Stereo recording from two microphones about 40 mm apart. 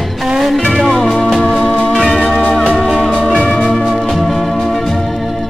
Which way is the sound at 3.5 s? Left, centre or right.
Centre.